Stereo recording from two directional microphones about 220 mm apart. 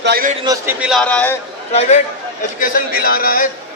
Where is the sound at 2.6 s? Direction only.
40° left (ahead or behind).